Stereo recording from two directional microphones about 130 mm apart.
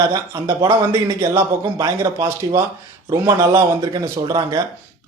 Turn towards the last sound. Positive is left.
turn(degrees=-30)  # may be behind; listen again after turning